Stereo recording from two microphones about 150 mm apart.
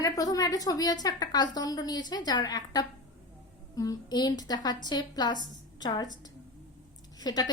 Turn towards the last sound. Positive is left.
turn(degrees=25)  # may be behind; listen again after turning